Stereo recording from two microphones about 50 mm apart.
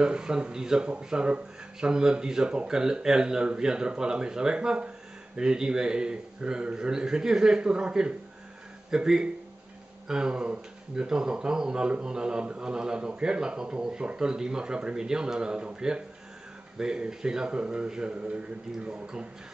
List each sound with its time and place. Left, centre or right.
0.0 s speech: centre